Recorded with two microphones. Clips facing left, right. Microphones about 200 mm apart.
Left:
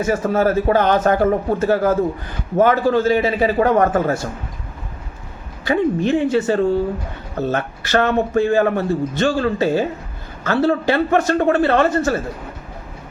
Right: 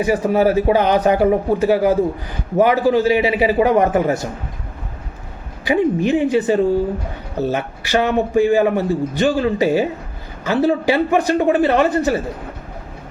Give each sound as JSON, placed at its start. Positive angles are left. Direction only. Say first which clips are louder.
{"t": 0.0, "sound": "a man's voice", "louder": "right 2 dB", "side_deg": -15}
{"t": 5.6, "sound": "a man's voice", "louder": "right 1 dB", "side_deg": -15}